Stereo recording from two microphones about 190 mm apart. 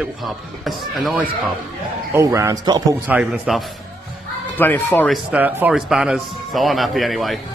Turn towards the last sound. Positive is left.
turn(degrees=0)  # may be behind; listen again after turning